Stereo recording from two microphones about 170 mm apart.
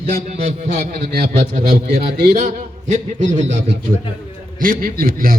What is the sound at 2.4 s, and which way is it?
A man's voice, 45° right (ahead or behind).